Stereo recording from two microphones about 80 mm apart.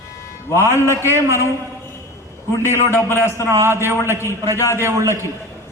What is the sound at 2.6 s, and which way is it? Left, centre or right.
Speech, left.